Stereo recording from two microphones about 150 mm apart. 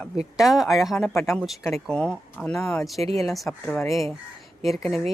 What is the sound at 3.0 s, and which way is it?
Speech, 40° right (ahead or behind).